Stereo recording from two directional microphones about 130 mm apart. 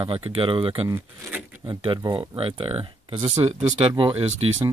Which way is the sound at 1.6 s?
35° right (ahead or behind).